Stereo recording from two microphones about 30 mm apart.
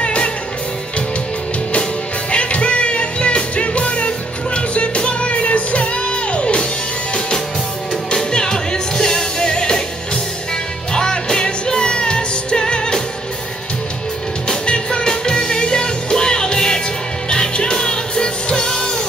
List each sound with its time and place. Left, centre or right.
0.0 s music: left
2.3 s music: left
10.9 s music: left
14.7 s music: left